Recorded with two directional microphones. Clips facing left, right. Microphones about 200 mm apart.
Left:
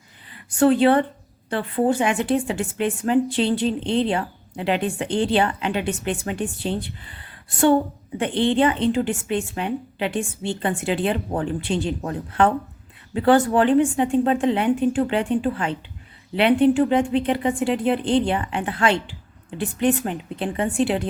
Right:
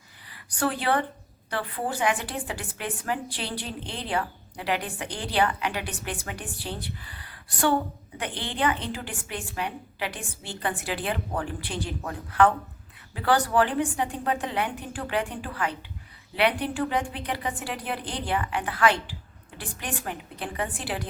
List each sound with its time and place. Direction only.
0.5 s a woman's voice: 25° left (ahead or behind)